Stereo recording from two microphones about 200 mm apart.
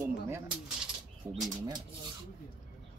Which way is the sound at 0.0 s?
10° right (ahead or behind).